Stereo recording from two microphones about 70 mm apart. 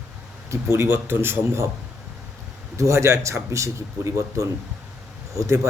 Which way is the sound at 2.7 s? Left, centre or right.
Right.